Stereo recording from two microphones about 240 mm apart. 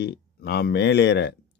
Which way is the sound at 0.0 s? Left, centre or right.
Left.